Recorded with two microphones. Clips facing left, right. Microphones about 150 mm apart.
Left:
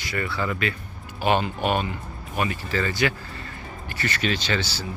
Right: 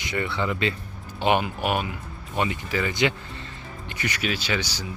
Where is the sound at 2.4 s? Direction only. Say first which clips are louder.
Even; 15° right (ahead or behind).